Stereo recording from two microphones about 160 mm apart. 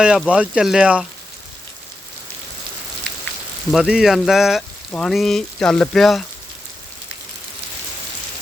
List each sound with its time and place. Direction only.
0.0 s speech: 5° right (ahead or behind)
3.7 s speech: 5° right (ahead or behind)